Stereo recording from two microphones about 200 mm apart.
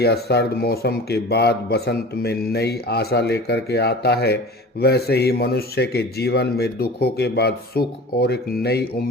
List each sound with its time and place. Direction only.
0.0 s speech: 55° left (ahead or behind)